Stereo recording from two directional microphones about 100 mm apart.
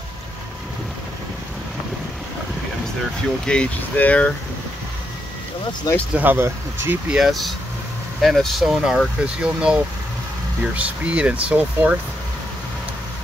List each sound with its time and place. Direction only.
3.4 s speech: 15° left (ahead or behind)
6.1 s speech: 20° right (ahead or behind)
7.1 s speech: 5° right (ahead or behind)